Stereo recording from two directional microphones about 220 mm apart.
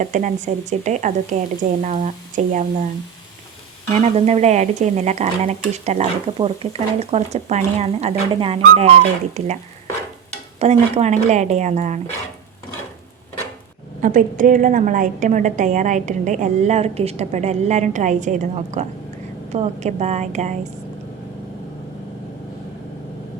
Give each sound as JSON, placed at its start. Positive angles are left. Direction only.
{"t": 0.0, "sound": "a woman's voice", "side_deg": -35}
{"t": 3.9, "sound": "a woman's voice", "side_deg": -30}
{"t": 10.6, "sound": "a woman's voice", "side_deg": -30}
{"t": 14.0, "sound": "a woman's voice", "side_deg": -35}